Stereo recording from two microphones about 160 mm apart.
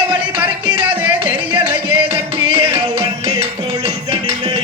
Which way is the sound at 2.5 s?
35° right (ahead or behind).